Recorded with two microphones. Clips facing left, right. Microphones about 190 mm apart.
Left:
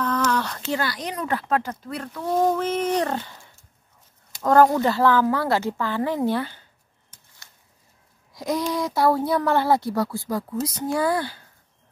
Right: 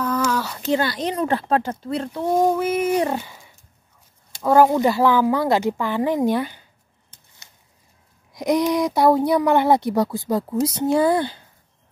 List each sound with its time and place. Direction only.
0.0 s a sound: 10° right (ahead or behind)
0.7 s speech: 25° right (ahead or behind)
2.3 s a woman's voice: 10° right (ahead or behind)
8.3 s speech: 20° right (ahead or behind)